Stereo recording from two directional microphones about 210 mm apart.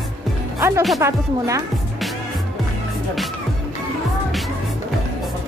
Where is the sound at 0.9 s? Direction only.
15° right (ahead or behind).